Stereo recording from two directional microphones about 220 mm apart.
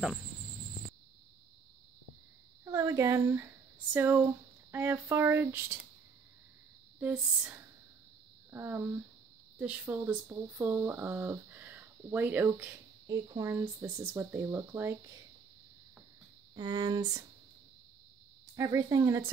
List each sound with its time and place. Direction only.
2.6 s speech: 15° right (ahead or behind)
7.0 s speech: 5° right (ahead or behind)
16.5 s speech: 20° right (ahead or behind)
18.6 s speech: 15° right (ahead or behind)